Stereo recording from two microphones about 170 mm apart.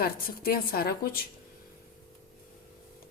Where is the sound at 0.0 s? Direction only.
60° left (ahead or behind).